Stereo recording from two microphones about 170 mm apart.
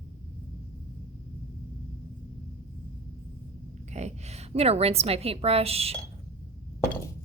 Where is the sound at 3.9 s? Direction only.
40° right (ahead or behind).